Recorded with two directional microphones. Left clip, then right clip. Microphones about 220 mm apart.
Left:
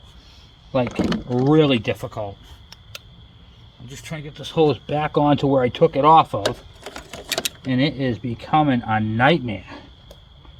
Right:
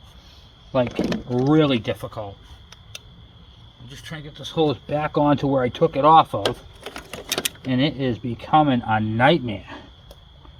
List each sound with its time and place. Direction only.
0.8 s speech: 15° left (ahead or behind)
1.5 s speech: 30° left (ahead or behind)
2.0 s speech: 40° left (ahead or behind)
3.8 s speech: 45° left (ahead or behind)
4.7 s speech: 30° left (ahead or behind)
7.1 s vehicle: 15° right (ahead or behind)
7.7 s speech: 25° left (ahead or behind)